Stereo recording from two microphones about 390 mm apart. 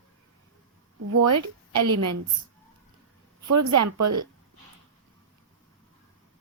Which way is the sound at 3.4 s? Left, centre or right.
Right.